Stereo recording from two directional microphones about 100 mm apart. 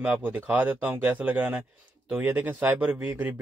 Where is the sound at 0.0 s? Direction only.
15° right (ahead or behind).